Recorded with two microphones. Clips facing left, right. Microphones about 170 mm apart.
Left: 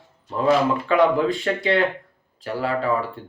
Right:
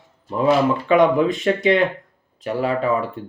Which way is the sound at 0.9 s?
20° right (ahead or behind).